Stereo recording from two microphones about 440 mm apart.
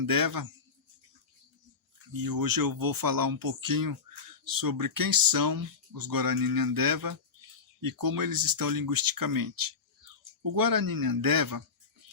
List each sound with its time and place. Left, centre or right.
0.0 s speech: right
2.1 s speech: right